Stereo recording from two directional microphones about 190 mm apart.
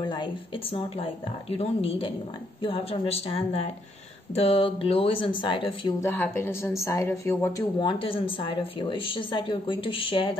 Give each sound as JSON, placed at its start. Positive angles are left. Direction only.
{"t": 0.0, "sound": "a woman's voice", "side_deg": 25}
{"t": 6.0, "sound": "a woman's voice", "side_deg": 10}
{"t": 7.8, "sound": "speech", "side_deg": 30}